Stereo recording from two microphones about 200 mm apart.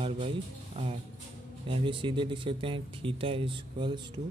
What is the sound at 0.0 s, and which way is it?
Speech, 25° right (ahead or behind).